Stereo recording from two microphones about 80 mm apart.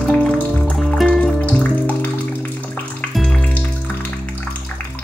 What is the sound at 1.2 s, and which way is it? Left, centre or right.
Music, centre.